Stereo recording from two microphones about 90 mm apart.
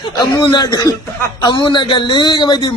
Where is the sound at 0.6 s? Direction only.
40° left (ahead or behind).